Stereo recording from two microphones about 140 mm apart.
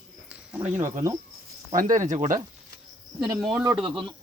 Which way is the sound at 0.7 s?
60° right (ahead or behind).